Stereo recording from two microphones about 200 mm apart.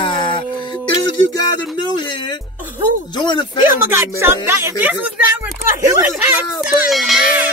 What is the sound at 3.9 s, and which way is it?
A child's voice, 10° right (ahead or behind).